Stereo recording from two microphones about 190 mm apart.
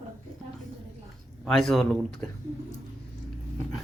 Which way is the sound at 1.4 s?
Centre (ahead or behind).